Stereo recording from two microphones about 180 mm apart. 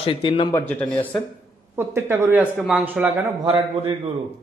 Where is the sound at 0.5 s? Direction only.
10° left (ahead or behind).